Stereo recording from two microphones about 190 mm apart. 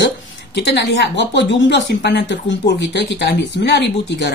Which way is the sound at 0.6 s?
65° left (ahead or behind).